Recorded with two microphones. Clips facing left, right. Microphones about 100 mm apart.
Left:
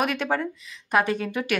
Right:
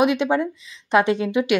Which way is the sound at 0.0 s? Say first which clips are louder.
Right 6 dB; 20° right (ahead or behind).